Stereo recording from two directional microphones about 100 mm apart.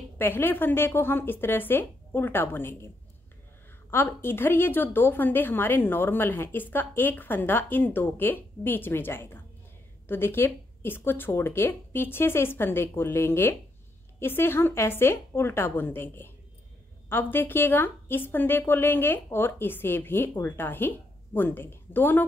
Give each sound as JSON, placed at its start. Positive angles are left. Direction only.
{"t": 0.2, "sound": "a woman's voice", "side_deg": 20}
{"t": 3.9, "sound": "a woman's voice", "side_deg": 20}